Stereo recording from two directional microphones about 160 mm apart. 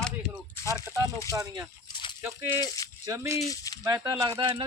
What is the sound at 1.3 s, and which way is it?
Speech, 20° right (ahead or behind).